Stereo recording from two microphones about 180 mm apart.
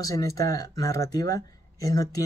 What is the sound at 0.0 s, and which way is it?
Speech, 20° left (ahead or behind).